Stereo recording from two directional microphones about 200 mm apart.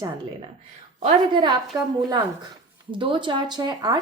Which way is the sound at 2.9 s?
25° right (ahead or behind).